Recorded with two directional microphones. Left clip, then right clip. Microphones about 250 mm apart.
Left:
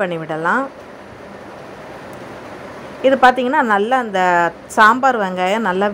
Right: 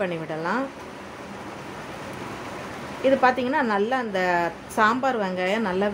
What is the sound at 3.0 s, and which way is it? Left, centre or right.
A woman's voice, centre.